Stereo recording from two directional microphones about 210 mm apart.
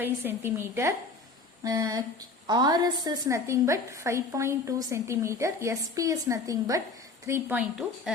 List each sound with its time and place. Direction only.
0.0 s a woman's voice: 10° right (ahead or behind)